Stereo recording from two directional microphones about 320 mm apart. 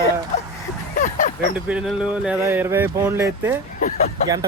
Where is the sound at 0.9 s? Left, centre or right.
Left.